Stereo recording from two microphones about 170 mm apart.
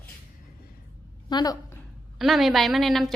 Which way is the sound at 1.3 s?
25° left (ahead or behind).